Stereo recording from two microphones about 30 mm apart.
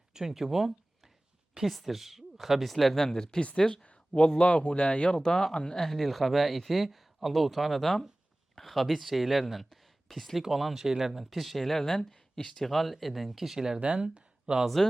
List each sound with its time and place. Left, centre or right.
0.3 s speech: centre
2.9 s speech: centre
3.9 s a sound: left
4.4 s speech: left
5.9 s speech: centre
9.6 s a sound: centre
10.6 s speech: centre
13.8 s speech: right